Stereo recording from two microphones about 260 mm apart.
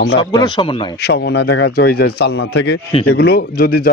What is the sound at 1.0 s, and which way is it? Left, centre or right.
A man's voice, left.